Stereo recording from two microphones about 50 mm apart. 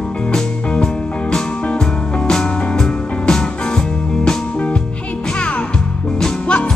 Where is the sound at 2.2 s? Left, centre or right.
Centre.